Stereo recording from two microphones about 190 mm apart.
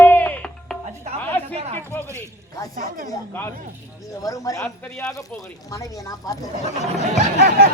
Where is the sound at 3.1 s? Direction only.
10° left (ahead or behind).